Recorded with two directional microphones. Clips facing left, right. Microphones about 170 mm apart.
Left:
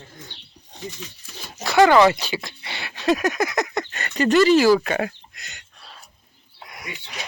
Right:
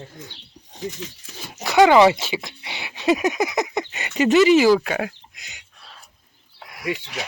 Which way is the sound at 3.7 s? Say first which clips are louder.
Right 1 dB; 15° right (ahead or behind).